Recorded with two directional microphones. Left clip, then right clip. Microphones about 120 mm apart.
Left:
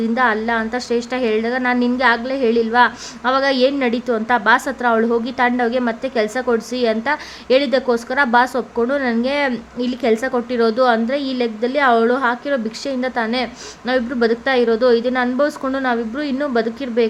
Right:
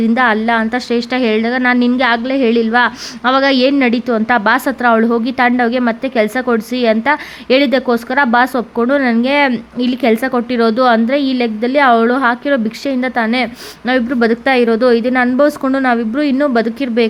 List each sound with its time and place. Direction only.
0.0 s a woman's voice: 55° right (ahead or behind)